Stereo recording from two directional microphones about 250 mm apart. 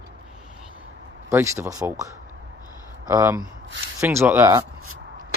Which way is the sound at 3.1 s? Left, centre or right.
Centre.